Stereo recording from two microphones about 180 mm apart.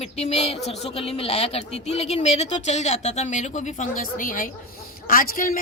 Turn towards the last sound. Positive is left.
turn(degrees=50)  # may be behind; listen again after turning